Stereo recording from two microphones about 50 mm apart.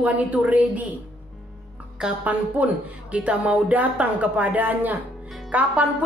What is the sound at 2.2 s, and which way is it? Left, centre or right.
A woman's voice, right.